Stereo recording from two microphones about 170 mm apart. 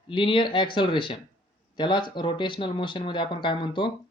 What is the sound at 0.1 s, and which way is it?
Speech, 30° left (ahead or behind).